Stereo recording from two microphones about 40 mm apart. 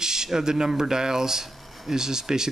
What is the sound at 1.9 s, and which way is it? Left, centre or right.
Speech, centre.